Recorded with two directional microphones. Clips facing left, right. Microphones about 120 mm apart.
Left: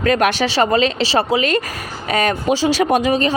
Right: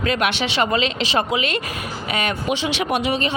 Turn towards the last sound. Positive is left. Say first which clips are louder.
# left 6 dB
turn(degrees=40)  # may be behind; listen again after turning